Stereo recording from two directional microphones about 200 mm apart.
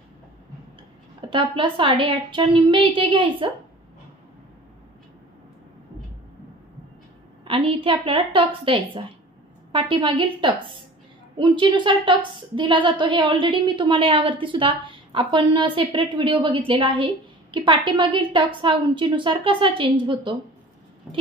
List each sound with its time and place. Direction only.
1.3 s a woman's voice: 25° right (ahead or behind)
7.4 s a woman's voice: 25° right (ahead or behind)